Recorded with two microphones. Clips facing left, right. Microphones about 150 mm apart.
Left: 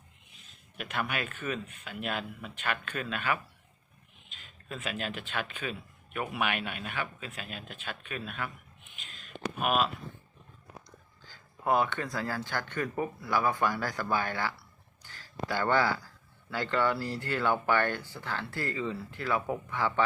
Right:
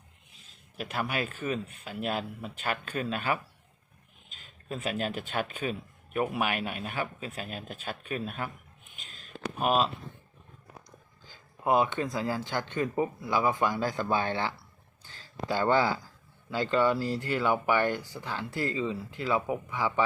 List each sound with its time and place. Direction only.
0.8 s speech: 35° right (ahead or behind)
4.4 s speech: 40° right (ahead or behind)
9.0 s a sound: 35° right (ahead or behind)
11.3 s speech: 20° right (ahead or behind)
15.0 s a sound: 20° right (ahead or behind)
16.5 s speech: 15° right (ahead or behind)